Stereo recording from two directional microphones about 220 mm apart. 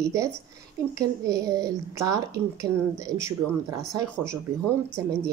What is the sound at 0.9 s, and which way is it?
Speech, 15° right (ahead or behind).